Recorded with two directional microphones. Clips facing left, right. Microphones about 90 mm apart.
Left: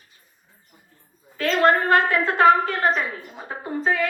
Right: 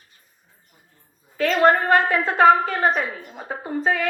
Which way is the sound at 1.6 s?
25° right (ahead or behind).